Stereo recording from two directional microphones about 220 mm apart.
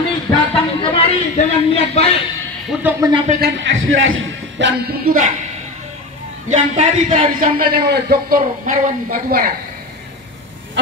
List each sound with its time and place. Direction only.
0.6 s a sound: 25° left (ahead or behind)
2.8 s speech: 15° right (ahead or behind)
3.3 s a man's voice: 45° right (ahead or behind)
6.5 s a man's voice: 30° right (ahead or behind)